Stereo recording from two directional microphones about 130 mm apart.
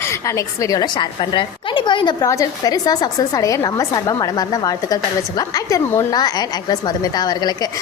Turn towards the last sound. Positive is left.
turn(degrees=30)  # may be behind; listen again after turning